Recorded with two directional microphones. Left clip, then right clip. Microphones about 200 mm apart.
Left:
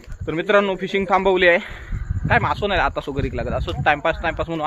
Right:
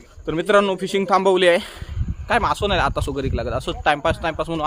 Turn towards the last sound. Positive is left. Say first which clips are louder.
# even
turn(degrees=-15)  # may be behind; listen again after turning